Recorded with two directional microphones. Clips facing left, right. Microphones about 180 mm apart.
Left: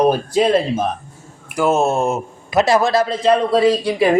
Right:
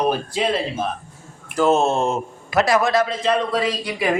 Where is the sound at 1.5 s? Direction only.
10° left (ahead or behind).